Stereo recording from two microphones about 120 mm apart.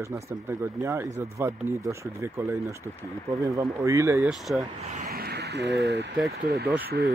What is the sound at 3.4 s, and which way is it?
Speech, 25° right (ahead or behind).